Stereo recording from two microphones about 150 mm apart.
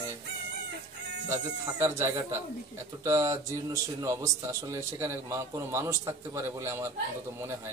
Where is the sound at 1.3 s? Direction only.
15° right (ahead or behind).